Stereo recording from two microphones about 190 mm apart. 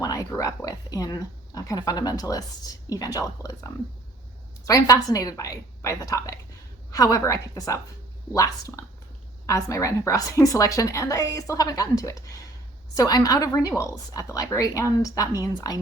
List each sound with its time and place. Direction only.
0.0 s a woman's voice: 20° left (ahead or behind)